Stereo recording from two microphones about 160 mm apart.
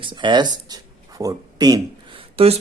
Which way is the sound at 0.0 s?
30° right (ahead or behind).